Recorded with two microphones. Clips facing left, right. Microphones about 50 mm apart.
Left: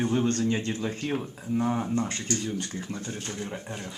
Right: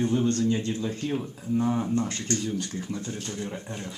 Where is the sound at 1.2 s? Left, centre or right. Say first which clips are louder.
Right 1 dB; centre.